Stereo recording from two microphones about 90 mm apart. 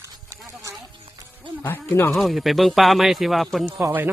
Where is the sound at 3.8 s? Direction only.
25° right (ahead or behind).